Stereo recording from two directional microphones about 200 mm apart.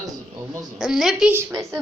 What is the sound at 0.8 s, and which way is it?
Speech, centre (ahead or behind).